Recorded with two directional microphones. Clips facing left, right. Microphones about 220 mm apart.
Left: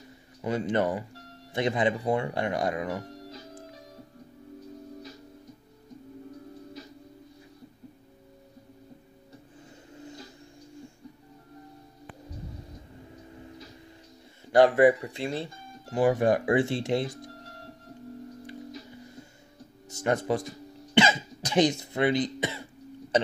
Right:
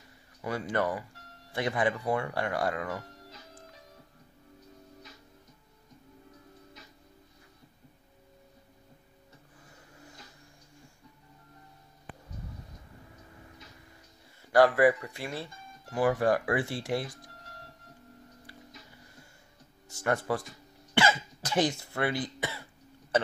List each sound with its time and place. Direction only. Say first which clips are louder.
0.4 s speech: left 4 dB; 20° left (ahead or behind)
9.9 s a sound: left 11 dB; 25° left (ahead or behind)
14.4 s speech: left 3 dB; 25° left (ahead or behind)
19.9 s speech: left 3 dB; 20° left (ahead or behind)
20.9 s cough: left 4 dB; 20° left (ahead or behind)